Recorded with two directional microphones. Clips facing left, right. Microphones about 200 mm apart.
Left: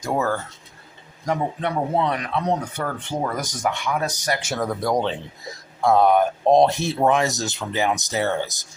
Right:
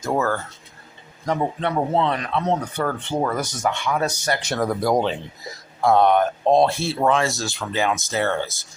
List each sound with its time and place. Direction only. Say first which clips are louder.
0.0 s speech: right 1 dB; 15° left (ahead or behind)
4.6 s speech: right 3 dB; 5° right (ahead or behind); by 8.5 s 15° left (ahead or behind)